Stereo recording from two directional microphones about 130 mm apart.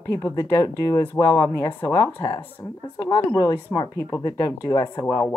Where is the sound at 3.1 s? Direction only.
30° left (ahead or behind).